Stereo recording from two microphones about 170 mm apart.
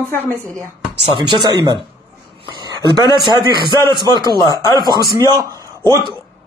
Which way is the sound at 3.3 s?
25° right (ahead or behind).